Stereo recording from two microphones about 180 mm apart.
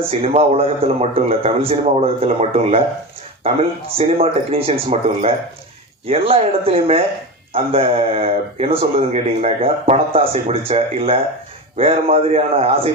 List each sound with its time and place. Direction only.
0.1 s speech: 35° right (ahead or behind)